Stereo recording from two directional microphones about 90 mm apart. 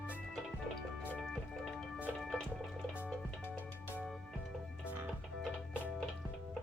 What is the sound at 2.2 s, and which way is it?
Music, 5° left (ahead or behind).